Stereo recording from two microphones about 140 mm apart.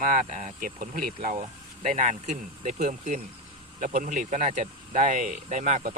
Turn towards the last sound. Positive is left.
turn(degrees=-55)  # may be behind; listen again after turning